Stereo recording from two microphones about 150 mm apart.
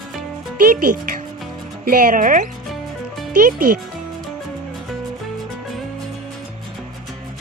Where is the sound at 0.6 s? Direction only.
70° right (ahead or behind).